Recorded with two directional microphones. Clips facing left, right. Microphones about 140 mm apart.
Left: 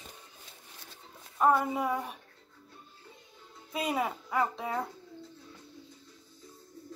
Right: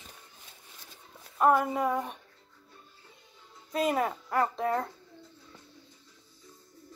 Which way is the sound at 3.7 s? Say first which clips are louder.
Right 3 dB; centre (ahead or behind).